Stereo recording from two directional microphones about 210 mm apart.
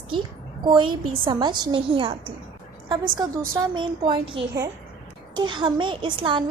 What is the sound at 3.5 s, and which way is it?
A woman's voice, 20° right (ahead or behind).